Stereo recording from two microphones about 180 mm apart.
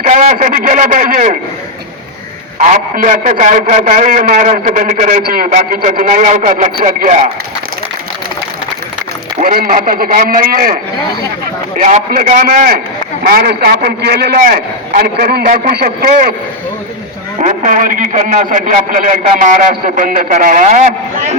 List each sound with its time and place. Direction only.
0.0 s a man's voice: 45° right (ahead or behind)
2.6 s a man's voice: 45° right (ahead or behind)
9.4 s a man's voice: 50° right (ahead or behind)
11.8 s a man's voice: 40° right (ahead or behind)
17.4 s a man's voice: 45° right (ahead or behind)